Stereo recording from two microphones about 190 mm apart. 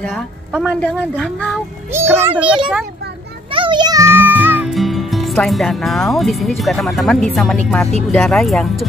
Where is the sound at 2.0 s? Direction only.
10° right (ahead or behind).